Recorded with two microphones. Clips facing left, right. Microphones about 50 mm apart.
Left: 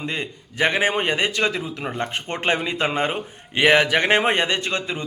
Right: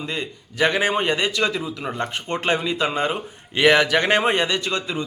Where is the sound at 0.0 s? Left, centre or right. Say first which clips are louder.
Even; left.